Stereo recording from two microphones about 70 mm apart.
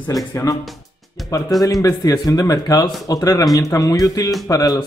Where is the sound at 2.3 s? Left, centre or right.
Left.